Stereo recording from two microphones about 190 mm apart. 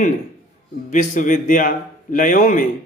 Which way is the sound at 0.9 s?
40° left (ahead or behind).